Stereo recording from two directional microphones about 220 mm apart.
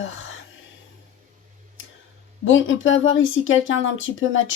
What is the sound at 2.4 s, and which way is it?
Speech, 60° left (ahead or behind).